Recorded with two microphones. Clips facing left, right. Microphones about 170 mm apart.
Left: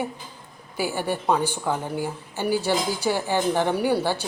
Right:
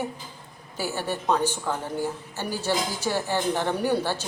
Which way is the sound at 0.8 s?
15° left (ahead or behind).